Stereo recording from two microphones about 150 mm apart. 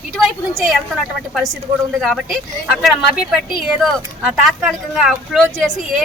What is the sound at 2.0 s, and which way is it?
Speech, centre (ahead or behind).